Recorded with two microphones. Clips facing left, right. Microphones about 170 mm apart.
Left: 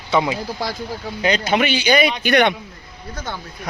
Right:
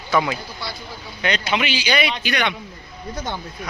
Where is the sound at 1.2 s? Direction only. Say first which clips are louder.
Left 4 dB; 40° left (ahead or behind).